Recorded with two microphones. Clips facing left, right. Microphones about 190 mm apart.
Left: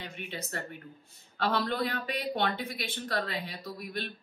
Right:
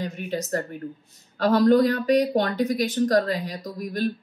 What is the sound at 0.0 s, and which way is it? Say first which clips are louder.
A woman's voice: right 11 dB; 40° right (ahead or behind).